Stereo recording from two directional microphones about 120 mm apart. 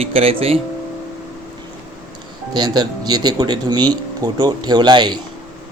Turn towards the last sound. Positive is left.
turn(degrees=-35)  # may be behind; listen again after turning